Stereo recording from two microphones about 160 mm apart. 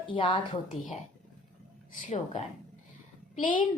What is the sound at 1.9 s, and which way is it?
Speech, 50° left (ahead or behind).